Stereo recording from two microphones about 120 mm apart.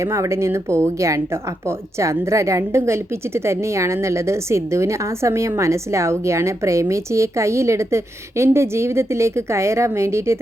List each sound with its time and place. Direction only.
0.0 s a woman's voice: 25° right (ahead or behind)